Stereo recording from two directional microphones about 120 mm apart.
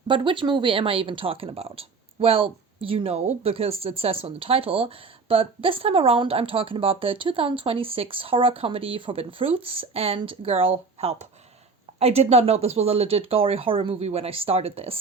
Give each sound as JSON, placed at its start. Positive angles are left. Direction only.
{"t": 0.1, "sound": "speech", "side_deg": -45}